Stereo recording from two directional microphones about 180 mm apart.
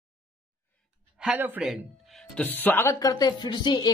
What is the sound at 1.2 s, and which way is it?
Speech, 5° right (ahead or behind).